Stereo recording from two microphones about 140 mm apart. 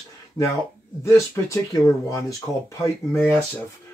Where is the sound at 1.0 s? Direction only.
20° left (ahead or behind).